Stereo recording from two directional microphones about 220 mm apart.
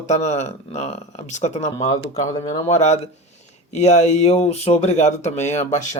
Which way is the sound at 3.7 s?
30° left (ahead or behind).